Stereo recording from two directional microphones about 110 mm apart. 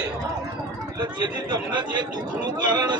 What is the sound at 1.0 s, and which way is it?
Speech, 40° right (ahead or behind).